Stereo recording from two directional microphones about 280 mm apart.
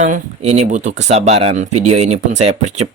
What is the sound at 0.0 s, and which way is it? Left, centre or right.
Speech, right.